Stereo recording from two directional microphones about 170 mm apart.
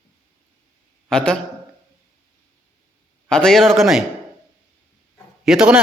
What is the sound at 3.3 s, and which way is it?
Speech, 5° left (ahead or behind).